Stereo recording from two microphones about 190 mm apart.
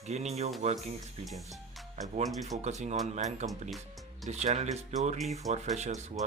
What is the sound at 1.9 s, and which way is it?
Speech, 40° right (ahead or behind).